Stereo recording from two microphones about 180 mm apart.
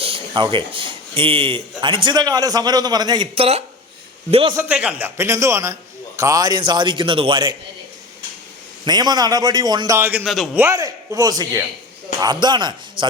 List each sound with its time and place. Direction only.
0.0 s a man's voice: 30° right (ahead or behind)
4.5 s a man's voice: 10° right (ahead or behind); by 7.5 s 30° right (ahead or behind)
8.8 s a man's voice: 20° right (ahead or behind); by 10.6 s centre (ahead or behind)
10.6 s a man's voice: 20° right (ahead or behind)